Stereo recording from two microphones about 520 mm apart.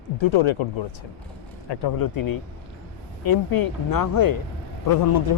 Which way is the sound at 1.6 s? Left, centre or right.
Left.